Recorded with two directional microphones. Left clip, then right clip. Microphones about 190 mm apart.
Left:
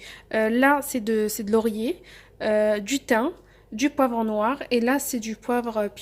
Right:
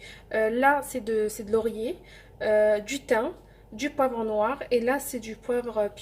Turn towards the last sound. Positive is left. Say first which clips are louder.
# left 2 dB
turn(degrees=55)  # may be behind; listen again after turning